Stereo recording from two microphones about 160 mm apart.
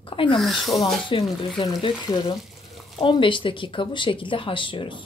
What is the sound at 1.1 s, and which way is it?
Speech, 30° left (ahead or behind).